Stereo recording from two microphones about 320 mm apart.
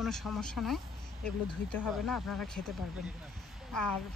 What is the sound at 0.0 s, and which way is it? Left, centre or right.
Speech, centre.